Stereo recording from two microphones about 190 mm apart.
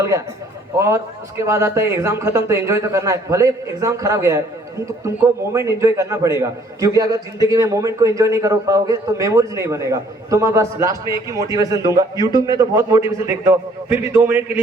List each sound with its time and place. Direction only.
0.8 s a man's voice: 15° right (ahead or behind)